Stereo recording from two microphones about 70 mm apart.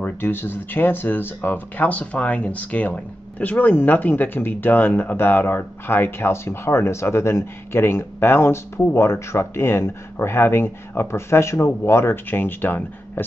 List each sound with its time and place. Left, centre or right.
0.0 s speech: left